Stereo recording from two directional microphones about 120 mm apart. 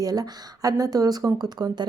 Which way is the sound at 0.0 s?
30° right (ahead or behind).